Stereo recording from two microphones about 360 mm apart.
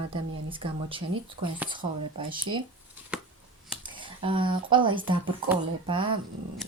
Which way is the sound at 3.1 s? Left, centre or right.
Centre.